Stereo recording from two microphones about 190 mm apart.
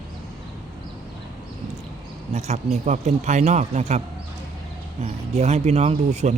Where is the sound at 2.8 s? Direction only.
40° right (ahead or behind).